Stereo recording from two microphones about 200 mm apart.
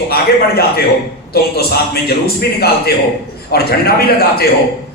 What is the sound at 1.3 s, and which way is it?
A man's voice, 50° left (ahead or behind).